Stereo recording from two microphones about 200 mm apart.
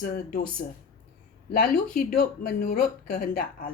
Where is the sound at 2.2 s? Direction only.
50° left (ahead or behind).